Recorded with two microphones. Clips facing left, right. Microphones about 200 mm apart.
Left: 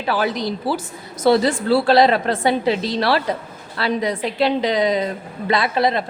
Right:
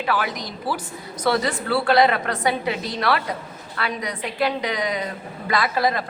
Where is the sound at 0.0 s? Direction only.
30° left (ahead or behind).